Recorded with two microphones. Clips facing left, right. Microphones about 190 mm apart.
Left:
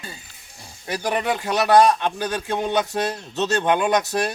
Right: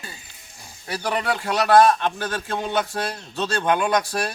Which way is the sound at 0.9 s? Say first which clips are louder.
Left 1 dB; 15° left (ahead or behind).